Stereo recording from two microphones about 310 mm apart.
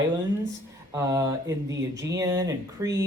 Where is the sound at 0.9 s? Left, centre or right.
Centre.